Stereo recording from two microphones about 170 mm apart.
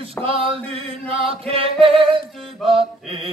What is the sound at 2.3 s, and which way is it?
Mantra, centre (ahead or behind).